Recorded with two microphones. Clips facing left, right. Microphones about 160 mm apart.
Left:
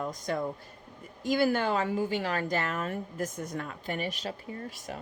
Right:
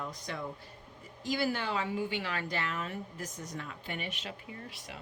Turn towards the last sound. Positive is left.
turn(degrees=45)  # may be behind; listen again after turning